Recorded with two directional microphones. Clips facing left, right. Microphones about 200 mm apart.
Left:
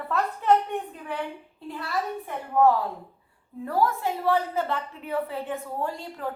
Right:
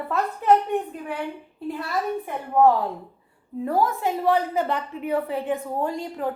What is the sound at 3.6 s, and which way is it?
A woman's voice, 20° right (ahead or behind).